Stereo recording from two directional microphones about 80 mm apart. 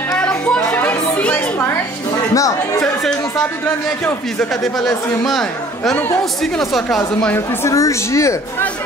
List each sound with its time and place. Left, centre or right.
0.1 s a sound: centre
0.7 s music: centre
2.3 s speech: left
2.8 s speech: centre
4.4 s speech: centre
7.3 s a woman's voice: left